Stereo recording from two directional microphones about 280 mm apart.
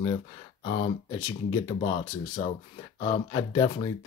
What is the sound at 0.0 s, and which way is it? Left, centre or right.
Speech, centre.